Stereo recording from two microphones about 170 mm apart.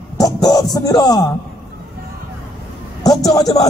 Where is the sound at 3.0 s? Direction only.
20° left (ahead or behind).